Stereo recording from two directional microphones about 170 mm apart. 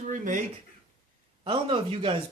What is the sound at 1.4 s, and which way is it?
Speech, 30° right (ahead or behind).